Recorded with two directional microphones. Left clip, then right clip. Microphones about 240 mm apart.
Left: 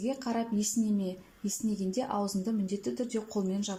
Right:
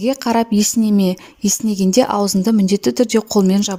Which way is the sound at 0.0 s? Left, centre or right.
Right.